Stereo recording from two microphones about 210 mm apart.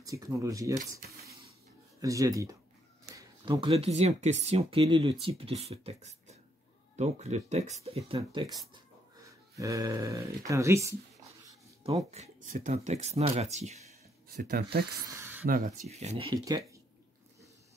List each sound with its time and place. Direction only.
0.0 s speech: 15° right (ahead or behind)
11.8 s speech: 30° right (ahead or behind)
14.3 s speech: 50° right (ahead or behind)
15.0 s speech: 15° right (ahead or behind)
15.4 s speech: 40° right (ahead or behind); by 16.8 s 15° right (ahead or behind)